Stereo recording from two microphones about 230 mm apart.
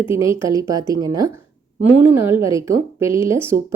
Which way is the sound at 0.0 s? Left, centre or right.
Centre.